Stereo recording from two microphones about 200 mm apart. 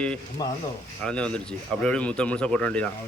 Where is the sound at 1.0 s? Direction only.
5° left (ahead or behind).